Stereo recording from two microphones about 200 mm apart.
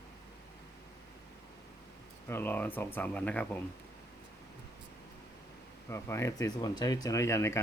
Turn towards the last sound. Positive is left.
turn(degrees=15)  # may be behind; listen again after turning